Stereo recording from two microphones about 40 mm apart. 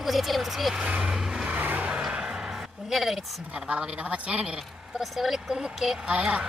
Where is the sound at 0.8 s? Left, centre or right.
Right.